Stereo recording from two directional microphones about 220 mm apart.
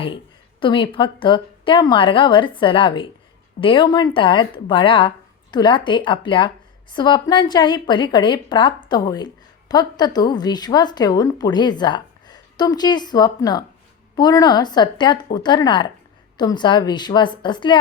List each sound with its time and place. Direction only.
0.6 s a woman's voice: 20° left (ahead or behind)